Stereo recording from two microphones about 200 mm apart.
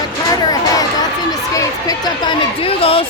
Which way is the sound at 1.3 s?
20° left (ahead or behind).